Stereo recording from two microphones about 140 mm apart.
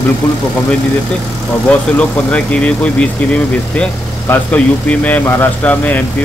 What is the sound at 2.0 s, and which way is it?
Speech, 10° left (ahead or behind).